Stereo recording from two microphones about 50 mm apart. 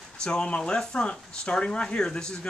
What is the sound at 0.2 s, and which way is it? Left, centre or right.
Speech, centre.